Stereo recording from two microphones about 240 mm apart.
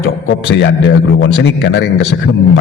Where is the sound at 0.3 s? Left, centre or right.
Left.